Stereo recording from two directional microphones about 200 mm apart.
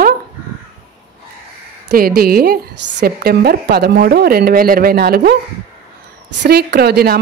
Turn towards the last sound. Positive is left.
turn(degrees=-50)  # may be behind; listen again after turning